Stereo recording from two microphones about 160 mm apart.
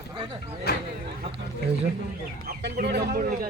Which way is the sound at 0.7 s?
75° left (ahead or behind).